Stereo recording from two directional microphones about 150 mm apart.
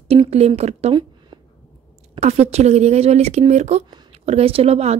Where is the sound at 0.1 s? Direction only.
40° right (ahead or behind).